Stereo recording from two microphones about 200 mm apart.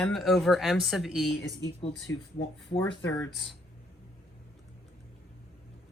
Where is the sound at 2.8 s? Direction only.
5° left (ahead or behind).